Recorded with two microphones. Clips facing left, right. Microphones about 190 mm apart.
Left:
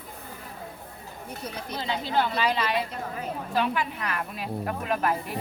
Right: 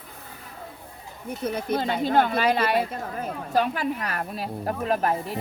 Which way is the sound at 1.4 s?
55° right (ahead or behind).